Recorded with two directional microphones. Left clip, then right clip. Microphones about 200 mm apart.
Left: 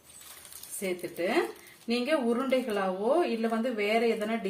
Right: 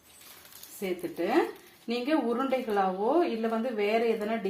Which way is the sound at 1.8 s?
20° right (ahead or behind).